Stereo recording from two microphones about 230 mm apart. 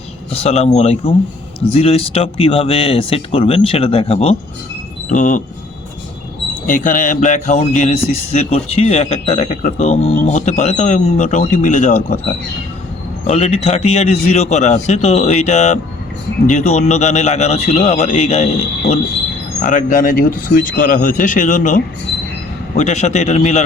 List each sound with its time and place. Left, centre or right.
0.3 s speech: left
6.7 s speech: left
19.6 s speech: left